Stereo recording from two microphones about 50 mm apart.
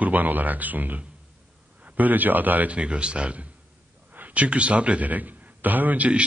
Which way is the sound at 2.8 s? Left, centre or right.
Right.